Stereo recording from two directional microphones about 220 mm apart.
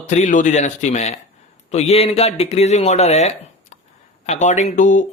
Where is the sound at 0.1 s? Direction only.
35° left (ahead or behind).